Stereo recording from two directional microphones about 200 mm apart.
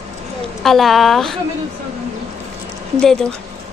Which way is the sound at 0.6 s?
Centre (ahead or behind).